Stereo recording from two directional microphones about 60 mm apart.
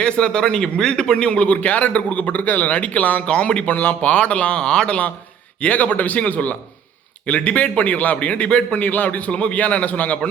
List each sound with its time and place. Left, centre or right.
0.0 s a man's voice: centre